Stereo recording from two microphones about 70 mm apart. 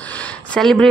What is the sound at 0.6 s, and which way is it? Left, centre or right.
Speech, centre.